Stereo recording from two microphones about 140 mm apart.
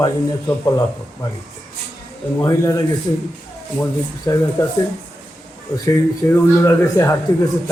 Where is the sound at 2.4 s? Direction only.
20° left (ahead or behind).